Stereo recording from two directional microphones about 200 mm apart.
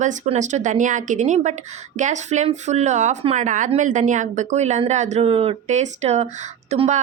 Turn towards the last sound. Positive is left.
turn(degrees=-35)  # may be behind; listen again after turning